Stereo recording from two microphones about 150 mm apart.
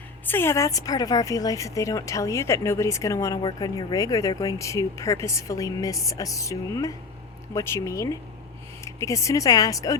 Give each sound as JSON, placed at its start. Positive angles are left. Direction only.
{"t": 0.3, "sound": "speech", "side_deg": 15}